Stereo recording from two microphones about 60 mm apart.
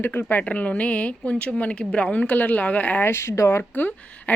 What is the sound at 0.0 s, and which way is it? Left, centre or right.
Speech, left.